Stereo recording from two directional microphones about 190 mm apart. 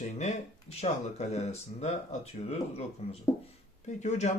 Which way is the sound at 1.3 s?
35° left (ahead or behind).